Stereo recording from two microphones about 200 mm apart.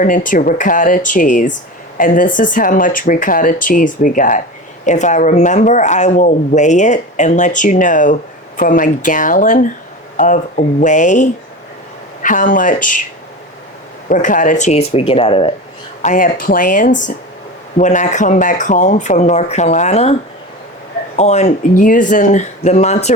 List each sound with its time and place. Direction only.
0.0 s speech: 40° left (ahead or behind)
14.1 s speech: 40° left (ahead or behind)
16.0 s speech: 40° left (ahead or behind)
21.2 s speech: 35° left (ahead or behind)